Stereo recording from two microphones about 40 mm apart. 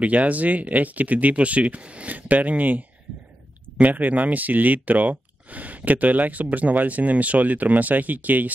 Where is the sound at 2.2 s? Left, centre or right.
Right.